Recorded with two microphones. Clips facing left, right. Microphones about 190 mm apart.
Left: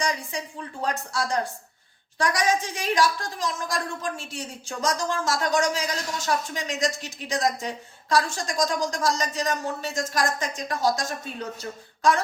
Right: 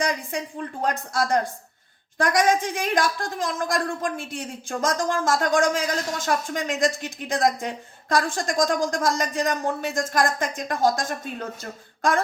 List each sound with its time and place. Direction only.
0.0 s a woman's voice: 55° right (ahead or behind)